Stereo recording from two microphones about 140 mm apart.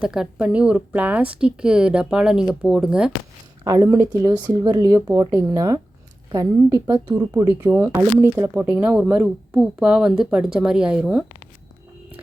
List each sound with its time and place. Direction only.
0.0 s speech: 5° right (ahead or behind)
3.6 s speech: 25° right (ahead or behind); by 11.3 s 5° right (ahead or behind)